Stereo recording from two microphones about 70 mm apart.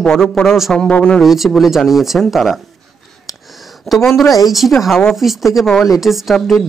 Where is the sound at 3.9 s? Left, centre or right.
Centre.